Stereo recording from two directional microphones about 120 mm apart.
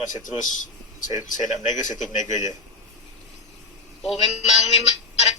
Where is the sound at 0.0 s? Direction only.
90° left.